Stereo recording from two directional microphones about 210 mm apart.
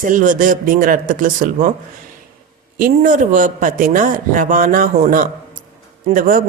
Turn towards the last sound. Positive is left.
turn(degrees=-40)  # may be behind; listen again after turning